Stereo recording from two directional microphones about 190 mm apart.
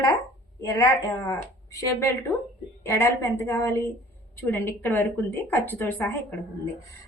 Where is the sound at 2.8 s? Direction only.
15° left (ahead or behind).